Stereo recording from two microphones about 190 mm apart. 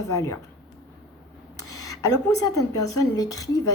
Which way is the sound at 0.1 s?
20° left (ahead or behind).